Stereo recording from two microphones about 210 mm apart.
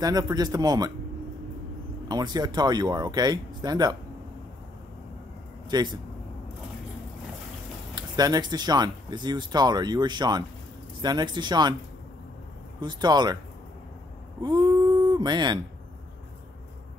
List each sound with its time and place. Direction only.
0.0 s a man's voice: 20° right (ahead or behind)
2.0 s speech: 20° right (ahead or behind)
5.7 s speech: 20° right (ahead or behind)
7.9 s speech: 20° right (ahead or behind)
12.8 s speech: 20° right (ahead or behind)
14.4 s a sound: 20° right (ahead or behind)